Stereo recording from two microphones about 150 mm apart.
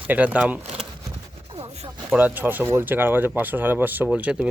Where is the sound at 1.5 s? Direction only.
40° right (ahead or behind).